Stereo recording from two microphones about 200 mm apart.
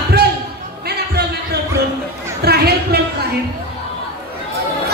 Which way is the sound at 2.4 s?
55° right (ahead or behind).